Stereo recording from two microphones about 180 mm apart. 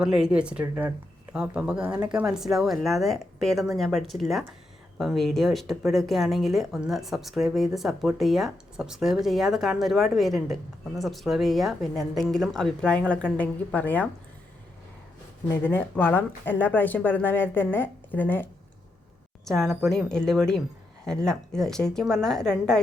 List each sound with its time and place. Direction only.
0.0 s speech: 5° right (ahead or behind)
15.4 s speech: 10° left (ahead or behind)
19.5 s speech: centre (ahead or behind)